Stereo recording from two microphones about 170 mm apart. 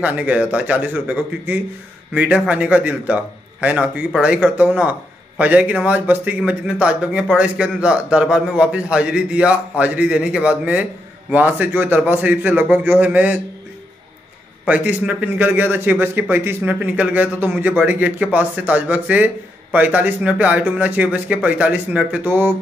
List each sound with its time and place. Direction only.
0.0 s a man's voice: 10° right (ahead or behind)
14.6 s a man's voice: 10° right (ahead or behind)